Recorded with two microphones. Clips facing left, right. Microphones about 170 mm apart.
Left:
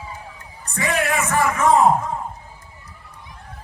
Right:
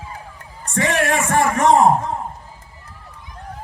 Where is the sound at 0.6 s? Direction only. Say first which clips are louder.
Right 6 dB; 85° right.